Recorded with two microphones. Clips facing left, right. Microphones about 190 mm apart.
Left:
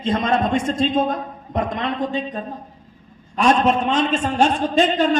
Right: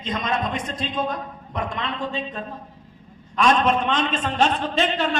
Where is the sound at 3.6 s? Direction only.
40° left (ahead or behind).